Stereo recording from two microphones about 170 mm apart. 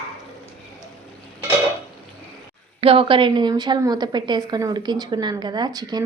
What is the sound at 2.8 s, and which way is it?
A woman's voice, 30° right (ahead or behind).